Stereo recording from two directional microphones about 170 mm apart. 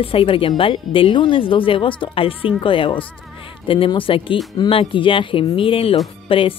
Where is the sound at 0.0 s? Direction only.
35° left (ahead or behind).